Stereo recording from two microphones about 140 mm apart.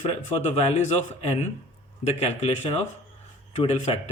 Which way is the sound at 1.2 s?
50° left (ahead or behind).